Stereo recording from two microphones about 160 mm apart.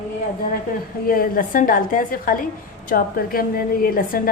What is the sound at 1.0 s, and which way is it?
A woman's voice, 65° left (ahead or behind).